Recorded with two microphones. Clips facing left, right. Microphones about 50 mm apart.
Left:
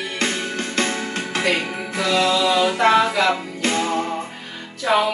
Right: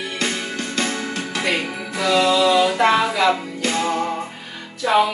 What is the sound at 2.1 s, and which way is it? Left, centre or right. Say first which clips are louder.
Music: right 3 dB; centre.